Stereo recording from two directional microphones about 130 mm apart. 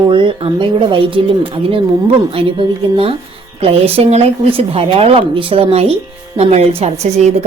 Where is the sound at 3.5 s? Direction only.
50° right (ahead or behind).